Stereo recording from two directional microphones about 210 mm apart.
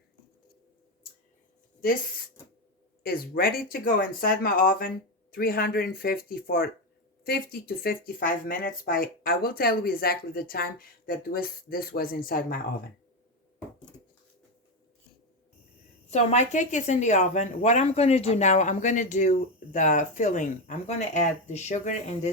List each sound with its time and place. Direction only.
1.8 s speech: 45° left (ahead or behind)
16.0 s speech: 30° left (ahead or behind)